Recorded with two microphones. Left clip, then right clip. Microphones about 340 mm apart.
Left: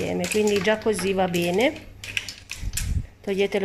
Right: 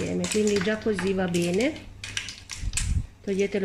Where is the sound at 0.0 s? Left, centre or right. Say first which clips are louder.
Left 3 dB; left.